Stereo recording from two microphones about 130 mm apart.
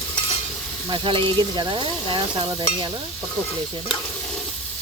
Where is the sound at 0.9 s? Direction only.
40° right (ahead or behind).